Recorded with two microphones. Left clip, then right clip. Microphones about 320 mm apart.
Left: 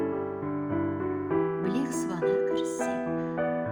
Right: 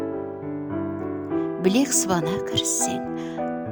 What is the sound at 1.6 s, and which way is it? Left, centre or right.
Speech, right.